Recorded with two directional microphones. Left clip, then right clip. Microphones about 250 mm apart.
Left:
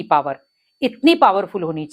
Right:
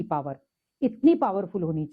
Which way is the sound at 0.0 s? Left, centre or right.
Centre.